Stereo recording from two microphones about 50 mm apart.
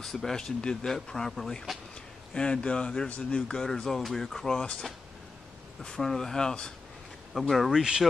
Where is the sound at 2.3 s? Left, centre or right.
Centre.